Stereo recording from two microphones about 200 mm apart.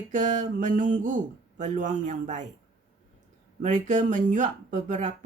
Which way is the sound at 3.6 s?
35° right (ahead or behind).